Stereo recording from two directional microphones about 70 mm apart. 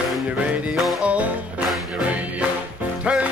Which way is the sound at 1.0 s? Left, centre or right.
Centre.